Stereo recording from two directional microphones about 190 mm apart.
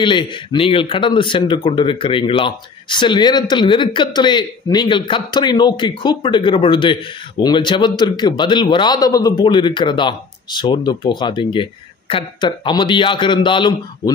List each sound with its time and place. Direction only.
0.0 s speech: 25° left (ahead or behind)